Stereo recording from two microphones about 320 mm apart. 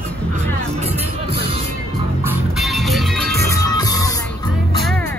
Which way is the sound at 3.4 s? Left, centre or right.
Centre.